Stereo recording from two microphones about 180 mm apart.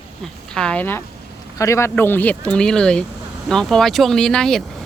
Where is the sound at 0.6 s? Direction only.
5° left (ahead or behind).